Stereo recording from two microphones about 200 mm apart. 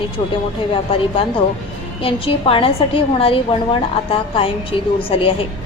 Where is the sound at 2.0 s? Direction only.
25° left (ahead or behind).